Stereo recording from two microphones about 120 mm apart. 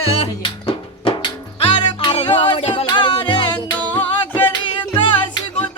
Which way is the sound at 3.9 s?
15° left (ahead or behind).